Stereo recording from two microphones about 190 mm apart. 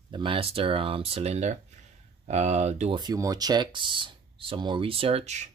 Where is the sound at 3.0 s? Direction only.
20° right (ahead or behind); by 5.5 s 35° right (ahead or behind).